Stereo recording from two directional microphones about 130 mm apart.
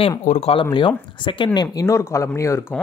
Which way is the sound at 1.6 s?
25° left (ahead or behind).